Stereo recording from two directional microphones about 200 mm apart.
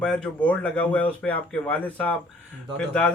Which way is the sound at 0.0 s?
5° left (ahead or behind).